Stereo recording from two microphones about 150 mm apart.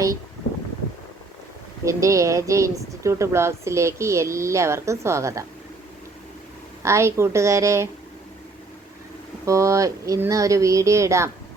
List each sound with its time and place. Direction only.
1.8 s speech: 20° right (ahead or behind)
6.8 s speech: 20° right (ahead or behind)
9.5 s speech: 20° right (ahead or behind)